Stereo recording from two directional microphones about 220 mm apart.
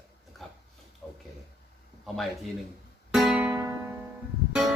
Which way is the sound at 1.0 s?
Centre (ahead or behind).